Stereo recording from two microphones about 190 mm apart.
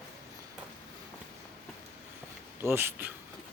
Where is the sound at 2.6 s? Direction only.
10° right (ahead or behind).